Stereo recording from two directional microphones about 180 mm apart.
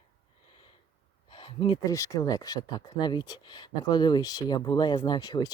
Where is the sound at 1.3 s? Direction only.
30° left (ahead or behind).